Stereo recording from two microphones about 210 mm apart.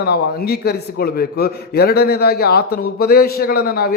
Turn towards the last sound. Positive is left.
turn(degrees=45)  # may be behind; listen again after turning